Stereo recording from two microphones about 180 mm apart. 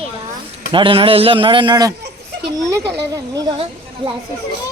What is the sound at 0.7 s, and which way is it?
A man's voice, 30° right (ahead or behind).